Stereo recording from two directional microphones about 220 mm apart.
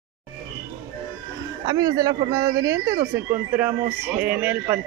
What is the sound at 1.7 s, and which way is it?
Speech, 15° right (ahead or behind).